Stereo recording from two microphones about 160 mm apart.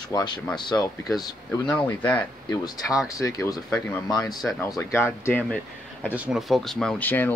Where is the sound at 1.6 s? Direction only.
10° left (ahead or behind).